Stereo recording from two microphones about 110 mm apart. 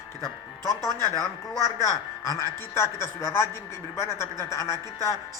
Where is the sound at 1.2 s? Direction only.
25° left (ahead or behind).